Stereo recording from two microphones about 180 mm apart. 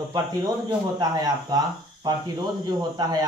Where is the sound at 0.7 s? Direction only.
20° right (ahead or behind).